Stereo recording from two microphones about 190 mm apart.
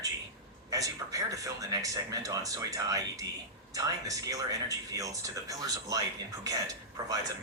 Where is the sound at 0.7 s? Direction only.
20° right (ahead or behind).